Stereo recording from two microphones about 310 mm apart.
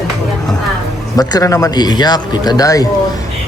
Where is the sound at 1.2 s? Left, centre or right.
Centre.